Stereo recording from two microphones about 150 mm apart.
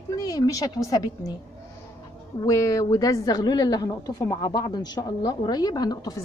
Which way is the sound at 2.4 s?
20° left (ahead or behind).